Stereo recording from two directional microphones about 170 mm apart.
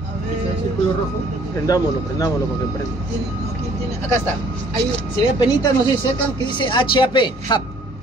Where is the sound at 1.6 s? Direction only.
20° left (ahead or behind).